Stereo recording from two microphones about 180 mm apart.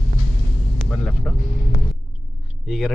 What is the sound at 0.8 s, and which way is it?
Vehicle, 5° left (ahead or behind).